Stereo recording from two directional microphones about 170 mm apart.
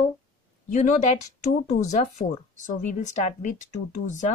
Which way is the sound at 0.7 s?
45° left (ahead or behind).